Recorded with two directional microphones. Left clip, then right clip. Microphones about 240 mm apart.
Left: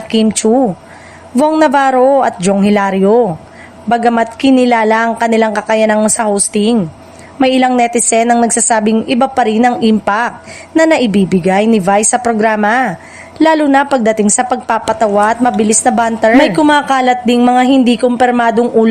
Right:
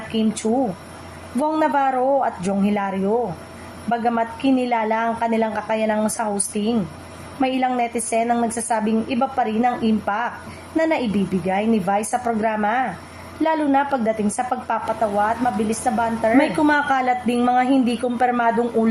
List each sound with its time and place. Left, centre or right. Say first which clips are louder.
0.4 s a woman's voice: left 10 dB; left